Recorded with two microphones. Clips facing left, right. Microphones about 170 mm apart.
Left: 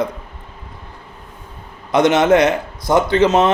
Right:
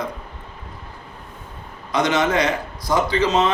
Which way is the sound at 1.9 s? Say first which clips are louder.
Left 7 dB; 60° left (ahead or behind).